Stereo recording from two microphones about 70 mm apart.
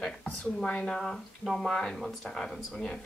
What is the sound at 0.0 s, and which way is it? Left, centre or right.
A woman's voice, centre.